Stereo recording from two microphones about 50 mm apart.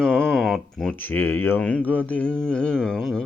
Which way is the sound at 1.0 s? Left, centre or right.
Left.